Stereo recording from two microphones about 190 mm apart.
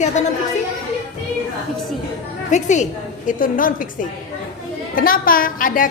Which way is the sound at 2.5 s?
40° left (ahead or behind).